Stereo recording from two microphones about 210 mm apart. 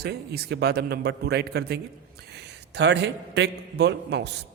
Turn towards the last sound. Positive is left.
turn(degrees=-55)  # may be behind; listen again after turning